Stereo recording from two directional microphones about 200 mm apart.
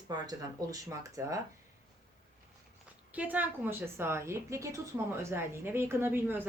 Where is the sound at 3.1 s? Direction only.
5° right (ahead or behind).